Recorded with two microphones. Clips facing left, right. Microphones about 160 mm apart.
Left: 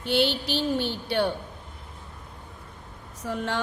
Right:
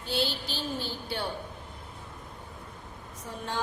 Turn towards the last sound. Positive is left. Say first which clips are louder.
# left 7 dB
turn(degrees=75)  # may be behind; listen again after turning